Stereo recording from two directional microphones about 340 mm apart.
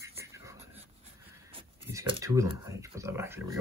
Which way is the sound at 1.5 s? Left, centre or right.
Centre.